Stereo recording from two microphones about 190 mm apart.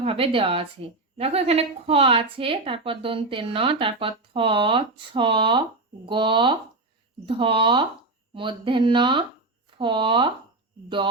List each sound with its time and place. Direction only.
0.0 s speech: 30° right (ahead or behind)